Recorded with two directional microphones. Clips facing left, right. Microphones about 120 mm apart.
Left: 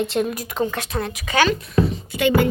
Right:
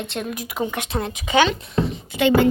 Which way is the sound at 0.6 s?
20° right (ahead or behind).